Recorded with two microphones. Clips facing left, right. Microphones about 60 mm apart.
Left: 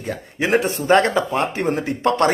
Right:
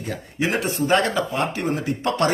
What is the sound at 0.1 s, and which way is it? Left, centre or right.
Speech, left.